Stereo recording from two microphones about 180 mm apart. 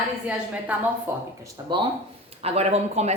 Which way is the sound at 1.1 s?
10° right (ahead or behind).